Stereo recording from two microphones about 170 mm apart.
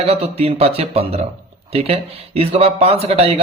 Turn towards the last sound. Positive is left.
turn(degrees=-35)  # may be behind; listen again after turning